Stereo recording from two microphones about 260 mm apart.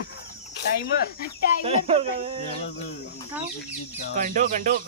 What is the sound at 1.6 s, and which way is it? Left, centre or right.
Speech, right.